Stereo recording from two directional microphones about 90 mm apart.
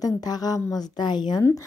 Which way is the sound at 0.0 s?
45° left (ahead or behind).